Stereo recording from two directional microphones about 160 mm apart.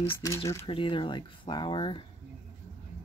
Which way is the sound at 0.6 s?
35° left (ahead or behind).